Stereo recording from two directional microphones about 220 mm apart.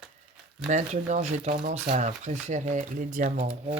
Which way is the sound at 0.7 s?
35° right (ahead or behind).